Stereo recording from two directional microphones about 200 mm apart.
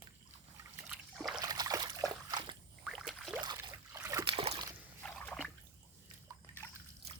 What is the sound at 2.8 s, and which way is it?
Rowboat, centre (ahead or behind).